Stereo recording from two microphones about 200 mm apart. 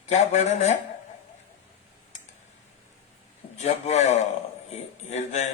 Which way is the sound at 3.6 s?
35° left (ahead or behind).